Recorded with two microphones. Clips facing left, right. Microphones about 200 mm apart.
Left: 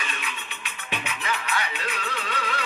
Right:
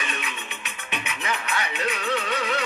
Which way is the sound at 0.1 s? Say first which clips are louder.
Right 3 dB; 20° right (ahead or behind).